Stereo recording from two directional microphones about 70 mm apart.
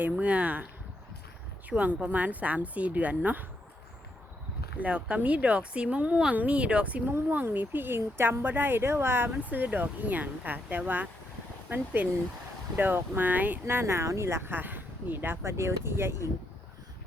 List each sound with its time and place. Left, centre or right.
0.0 s speech: centre
1.7 s speech: centre
4.8 s speech: centre; by 16.2 s right